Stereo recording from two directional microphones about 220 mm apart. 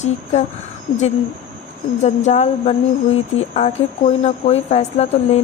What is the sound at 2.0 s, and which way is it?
Speech, 30° left (ahead or behind).